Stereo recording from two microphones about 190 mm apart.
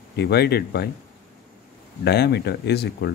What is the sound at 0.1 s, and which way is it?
Speech, 60° left (ahead or behind).